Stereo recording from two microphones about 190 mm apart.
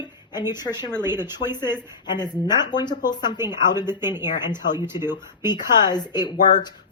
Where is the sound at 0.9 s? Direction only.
10° right (ahead or behind).